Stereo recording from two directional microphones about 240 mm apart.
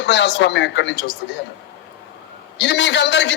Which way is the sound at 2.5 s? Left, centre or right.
Left.